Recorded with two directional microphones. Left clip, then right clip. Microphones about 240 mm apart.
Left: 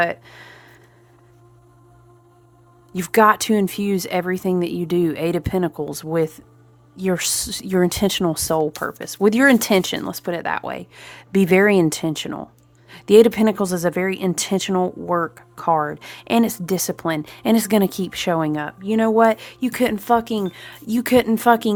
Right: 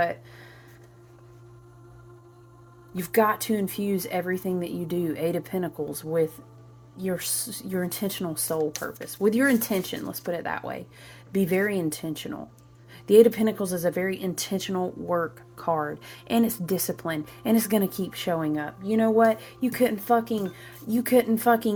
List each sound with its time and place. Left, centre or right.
0.0 s speech: left
2.9 s a woman's voice: left